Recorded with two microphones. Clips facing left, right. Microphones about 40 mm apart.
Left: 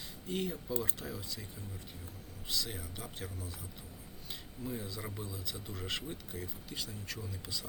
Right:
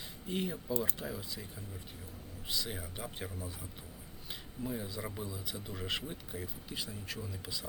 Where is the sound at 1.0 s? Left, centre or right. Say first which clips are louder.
Right 2 dB; centre.